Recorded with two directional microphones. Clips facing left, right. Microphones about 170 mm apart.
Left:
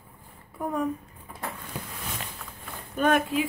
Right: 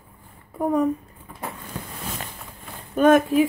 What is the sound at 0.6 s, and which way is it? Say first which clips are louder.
Speech: right 8 dB; 40° right (ahead or behind).